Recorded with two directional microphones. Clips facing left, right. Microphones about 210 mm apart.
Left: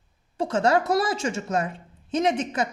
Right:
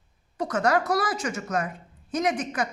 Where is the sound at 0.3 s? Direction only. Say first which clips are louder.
Left 2 dB; 25° left (ahead or behind).